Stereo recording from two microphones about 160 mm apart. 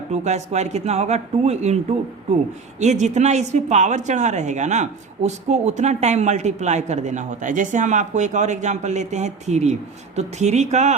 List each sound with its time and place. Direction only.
0.1 s a woman's voice: 45° right (ahead or behind)
2.8 s a woman's voice: 45° right (ahead or behind)